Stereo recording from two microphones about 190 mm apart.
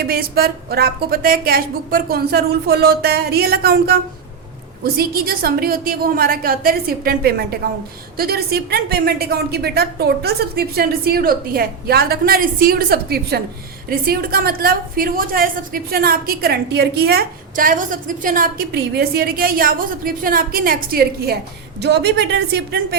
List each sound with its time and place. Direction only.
0.0 s a woman's voice: 50° right (ahead or behind)